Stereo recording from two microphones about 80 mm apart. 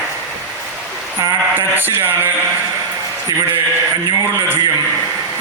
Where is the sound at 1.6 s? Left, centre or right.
Right.